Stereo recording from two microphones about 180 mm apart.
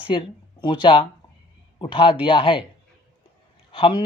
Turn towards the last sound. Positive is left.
turn(degrees=30)  # may be behind; listen again after turning